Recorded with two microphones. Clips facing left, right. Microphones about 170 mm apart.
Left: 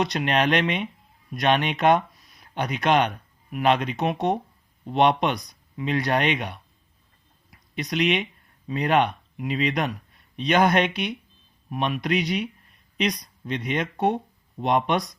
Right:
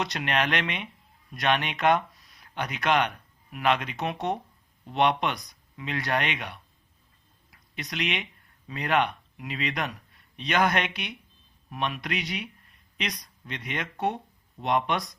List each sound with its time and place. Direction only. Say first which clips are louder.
0.0 s speech: left 5 dB; 20° left (ahead or behind)
7.8 s speech: left 8 dB; 20° left (ahead or behind)